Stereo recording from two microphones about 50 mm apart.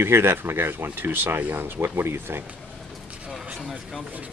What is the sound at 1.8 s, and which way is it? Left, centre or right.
Speech, right.